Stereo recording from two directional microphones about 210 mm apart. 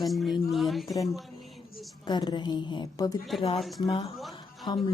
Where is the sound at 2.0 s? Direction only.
20° left (ahead or behind).